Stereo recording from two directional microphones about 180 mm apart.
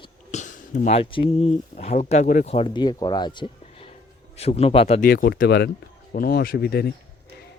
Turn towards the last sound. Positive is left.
turn(degrees=60)  # may be behind; listen again after turning